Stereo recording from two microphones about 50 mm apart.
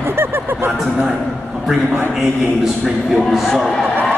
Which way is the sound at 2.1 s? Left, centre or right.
Centre.